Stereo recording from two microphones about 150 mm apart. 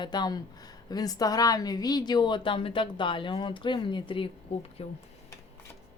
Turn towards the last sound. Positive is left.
turn(degrees=40)  # may be behind; listen again after turning